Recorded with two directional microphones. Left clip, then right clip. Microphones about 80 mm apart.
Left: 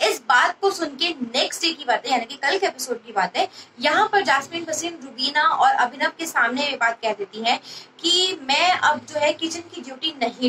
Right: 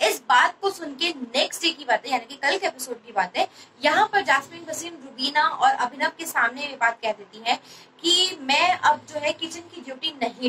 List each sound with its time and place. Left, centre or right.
0.0 s a woman's voice: left